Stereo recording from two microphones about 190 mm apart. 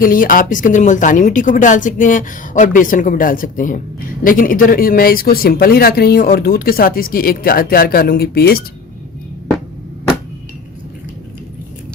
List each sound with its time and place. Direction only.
0.0 s speech: 45° left (ahead or behind)